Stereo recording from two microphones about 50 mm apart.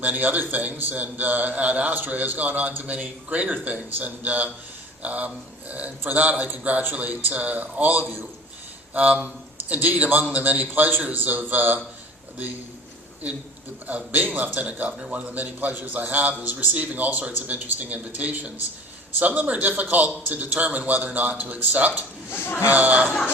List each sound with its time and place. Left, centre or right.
0.0 s a man's voice: right
13.8 s a man's voice: right
22.3 s speech: left
22.7 s a man's voice: right